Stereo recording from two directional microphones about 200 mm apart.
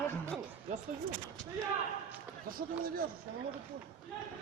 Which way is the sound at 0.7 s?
35° right (ahead or behind).